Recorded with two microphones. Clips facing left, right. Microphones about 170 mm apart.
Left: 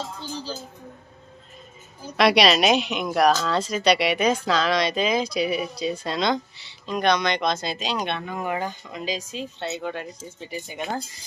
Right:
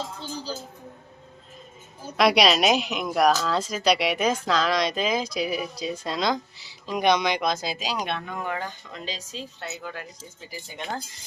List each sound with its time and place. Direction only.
2.1 s speech: centre (ahead or behind)
6.9 s speech: 15° right (ahead or behind); by 10.8 s 25° left (ahead or behind)